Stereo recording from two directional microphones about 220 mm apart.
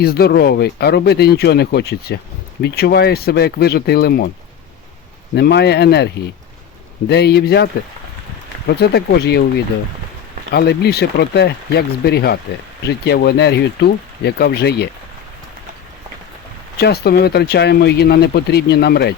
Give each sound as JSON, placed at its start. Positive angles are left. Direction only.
{"t": 0.0, "sound": "speech", "side_deg": 45}
{"t": 5.3, "sound": "speech", "side_deg": 50}
{"t": 7.1, "sound": "speech", "side_deg": 50}
{"t": 10.5, "sound": "speech", "side_deg": 45}
{"t": 16.8, "sound": "speech", "side_deg": 45}